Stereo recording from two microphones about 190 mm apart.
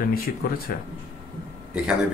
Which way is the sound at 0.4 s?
50° left (ahead or behind).